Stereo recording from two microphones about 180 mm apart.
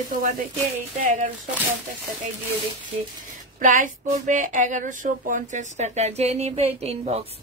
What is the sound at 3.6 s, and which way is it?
Speech, 45° right (ahead or behind).